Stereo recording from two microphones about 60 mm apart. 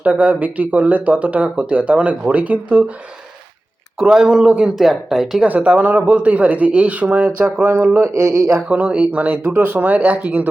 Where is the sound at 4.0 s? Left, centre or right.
Centre.